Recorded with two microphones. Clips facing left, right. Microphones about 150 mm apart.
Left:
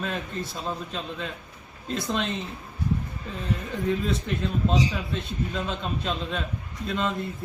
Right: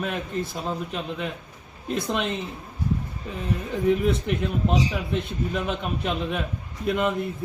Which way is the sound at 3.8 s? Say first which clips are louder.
Right 5 dB; 15° right (ahead or behind).